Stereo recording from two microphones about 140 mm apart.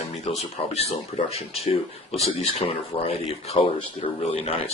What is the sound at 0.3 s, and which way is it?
Speech, 50° left (ahead or behind).